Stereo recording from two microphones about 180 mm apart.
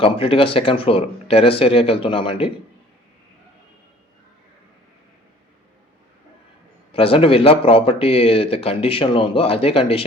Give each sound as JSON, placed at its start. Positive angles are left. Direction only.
{"t": 0.0, "sound": "speech", "side_deg": 30}
{"t": 6.9, "sound": "speech", "side_deg": 30}